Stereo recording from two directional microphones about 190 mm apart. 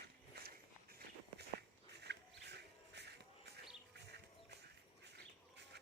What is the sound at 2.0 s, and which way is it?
Music, 60° right (ahead or behind).